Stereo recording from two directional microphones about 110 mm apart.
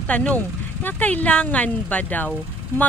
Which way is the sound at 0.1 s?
10° left (ahead or behind).